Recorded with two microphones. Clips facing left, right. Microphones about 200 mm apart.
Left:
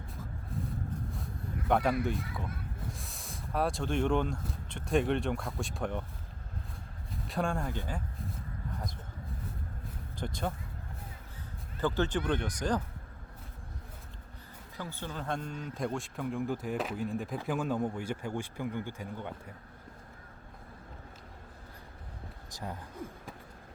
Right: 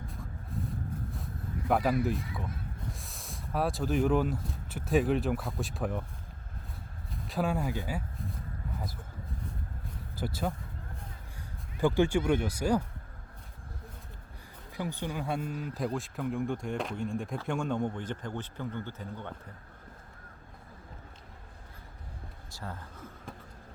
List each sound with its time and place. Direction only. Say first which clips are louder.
1.1 s a sound: right 1 dB; centre (ahead or behind)
3.0 s speech: even; centre (ahead or behind)
7.3 s speech: right 2 dB; 5° right (ahead or behind)
10.2 s speech: right 2 dB; 5° right (ahead or behind)
11.8 s speech: right 4 dB; 10° right (ahead or behind)
14.8 s a man's voice: right 5 dB; 15° right (ahead or behind); by 19.3 s 10° left (ahead or behind)
22.5 s a man's voice: left 1 dB; 15° left (ahead or behind)